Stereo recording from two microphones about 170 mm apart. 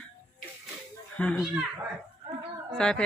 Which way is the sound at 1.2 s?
10° left (ahead or behind).